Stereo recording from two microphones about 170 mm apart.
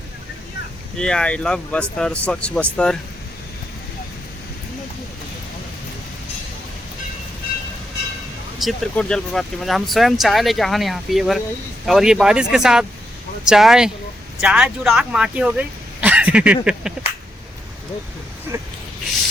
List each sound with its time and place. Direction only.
0.9 s speech: 5° left (ahead or behind)
8.5 s speech: centre (ahead or behind)
18.5 s a sound: 15° right (ahead or behind)